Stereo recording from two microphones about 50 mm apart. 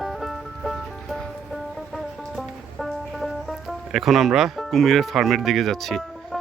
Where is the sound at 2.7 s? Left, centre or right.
Centre.